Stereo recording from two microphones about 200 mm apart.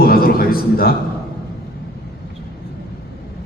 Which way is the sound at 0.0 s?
45° left (ahead or behind).